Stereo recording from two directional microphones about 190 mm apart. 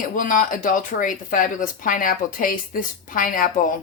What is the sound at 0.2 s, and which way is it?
Speech, 45° left (ahead or behind).